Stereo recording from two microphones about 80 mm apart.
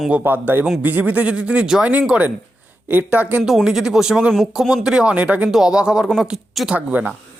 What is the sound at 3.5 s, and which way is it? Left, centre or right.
Speech, centre.